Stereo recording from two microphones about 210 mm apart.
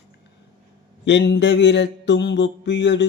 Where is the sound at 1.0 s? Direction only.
55° left (ahead or behind).